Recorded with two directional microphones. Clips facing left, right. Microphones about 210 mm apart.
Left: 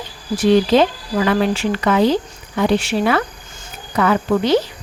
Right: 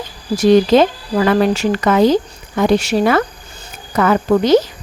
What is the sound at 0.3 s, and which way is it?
Speech, 45° right (ahead or behind).